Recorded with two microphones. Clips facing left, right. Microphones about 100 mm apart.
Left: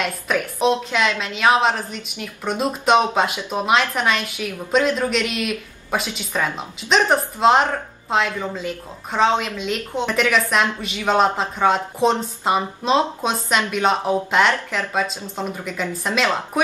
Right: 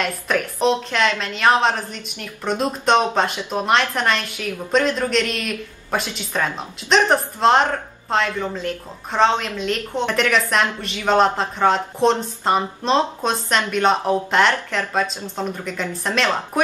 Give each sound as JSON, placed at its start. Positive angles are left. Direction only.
{"t": 0.0, "sound": "speech", "side_deg": 5}